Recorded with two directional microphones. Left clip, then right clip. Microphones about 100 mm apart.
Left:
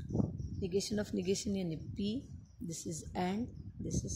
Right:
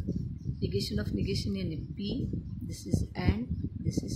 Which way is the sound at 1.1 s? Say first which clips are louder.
Right 1 dB; 80° left.